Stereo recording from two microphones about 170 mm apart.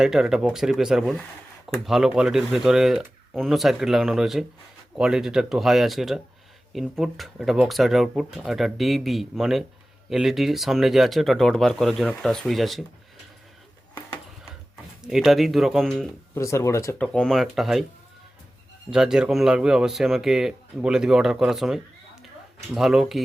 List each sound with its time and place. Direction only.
0.0 s speech: 5° right (ahead or behind)
15.0 s speech: centre (ahead or behind)
16.3 s speech: 15° left (ahead or behind)
17.0 s speech: 5° left (ahead or behind)
18.9 s speech: 5° right (ahead or behind)